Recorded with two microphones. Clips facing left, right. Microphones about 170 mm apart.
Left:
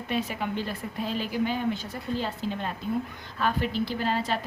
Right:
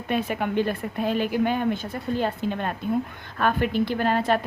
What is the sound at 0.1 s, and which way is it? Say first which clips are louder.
A woman's voice: right 5 dB; 55° right (ahead or behind).